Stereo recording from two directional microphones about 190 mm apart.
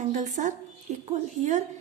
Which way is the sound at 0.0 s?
40° right (ahead or behind).